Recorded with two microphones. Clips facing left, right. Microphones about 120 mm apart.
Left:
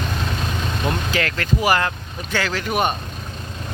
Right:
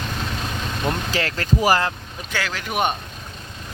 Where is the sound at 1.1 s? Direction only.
30° right (ahead or behind).